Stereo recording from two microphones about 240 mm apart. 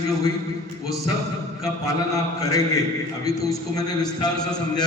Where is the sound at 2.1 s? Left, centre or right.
Centre.